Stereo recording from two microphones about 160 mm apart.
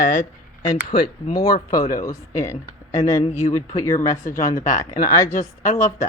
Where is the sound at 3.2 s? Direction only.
40° left (ahead or behind).